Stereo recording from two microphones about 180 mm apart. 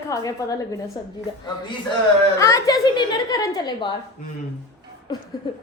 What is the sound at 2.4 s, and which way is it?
A woman's voice, 20° left (ahead or behind).